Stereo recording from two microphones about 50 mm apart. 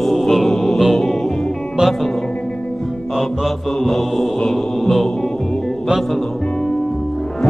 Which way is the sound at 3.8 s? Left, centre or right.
Centre.